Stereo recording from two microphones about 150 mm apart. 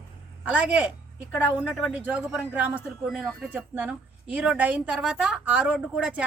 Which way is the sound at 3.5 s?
10° right (ahead or behind).